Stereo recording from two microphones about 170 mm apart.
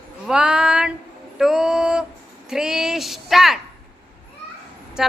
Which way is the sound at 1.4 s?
5° right (ahead or behind).